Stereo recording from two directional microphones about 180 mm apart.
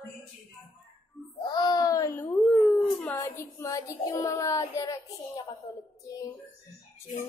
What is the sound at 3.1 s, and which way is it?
A woman's voice, 20° left (ahead or behind).